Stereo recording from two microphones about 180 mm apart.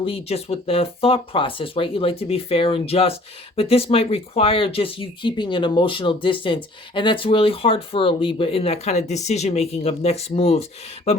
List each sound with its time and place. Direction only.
0.0 s speech: 35° left (ahead or behind)